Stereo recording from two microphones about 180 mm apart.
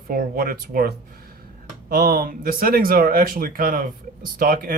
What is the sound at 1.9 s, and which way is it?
Speech, 55° right (ahead or behind).